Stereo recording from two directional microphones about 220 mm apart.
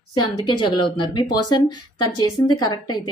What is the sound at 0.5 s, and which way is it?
Speech, 20° left (ahead or behind).